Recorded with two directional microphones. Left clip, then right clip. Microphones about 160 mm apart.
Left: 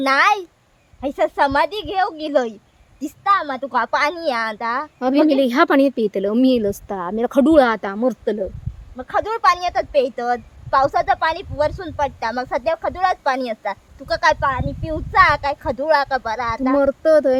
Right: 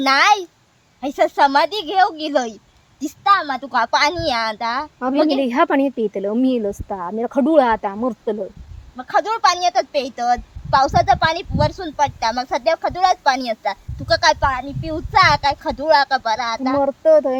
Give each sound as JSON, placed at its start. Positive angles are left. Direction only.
{"t": 0.0, "sound": "a woman's voice", "side_deg": 5}
{"t": 4.9, "sound": "speech", "side_deg": 25}
{"t": 5.4, "sound": "speech", "side_deg": 35}
{"t": 9.0, "sound": "a woman's voice", "side_deg": 10}
{"t": 16.8, "sound": "speech", "side_deg": 25}